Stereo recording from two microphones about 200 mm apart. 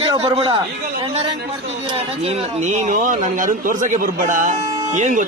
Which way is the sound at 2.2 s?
35° right (ahead or behind).